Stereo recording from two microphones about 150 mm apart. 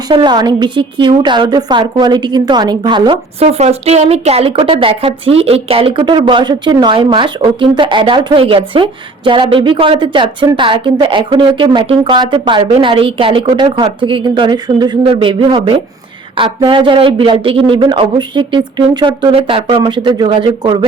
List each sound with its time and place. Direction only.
0.1 s a woman's voice: 30° right (ahead or behind)
3.4 s speech: 45° right (ahead or behind)